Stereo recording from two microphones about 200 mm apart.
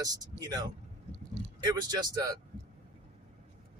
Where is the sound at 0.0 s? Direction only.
20° right (ahead or behind).